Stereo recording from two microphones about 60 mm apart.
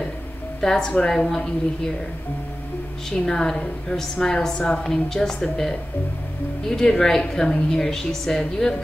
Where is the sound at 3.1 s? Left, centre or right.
Centre.